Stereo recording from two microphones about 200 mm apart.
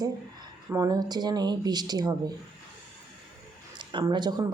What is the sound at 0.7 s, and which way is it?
A woman's voice, 20° right (ahead or behind).